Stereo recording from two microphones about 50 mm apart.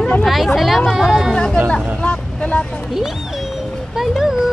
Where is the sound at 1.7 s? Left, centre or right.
Left.